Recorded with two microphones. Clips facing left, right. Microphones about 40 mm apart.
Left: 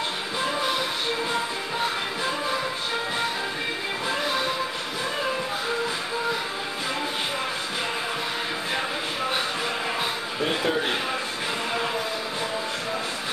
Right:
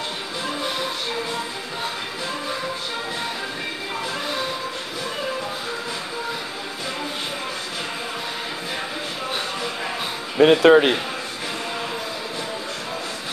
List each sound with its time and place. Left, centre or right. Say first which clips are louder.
10.4 s speech: right 13 dB; right